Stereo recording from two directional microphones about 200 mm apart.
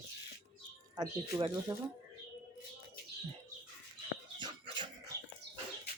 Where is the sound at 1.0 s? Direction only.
20° right (ahead or behind).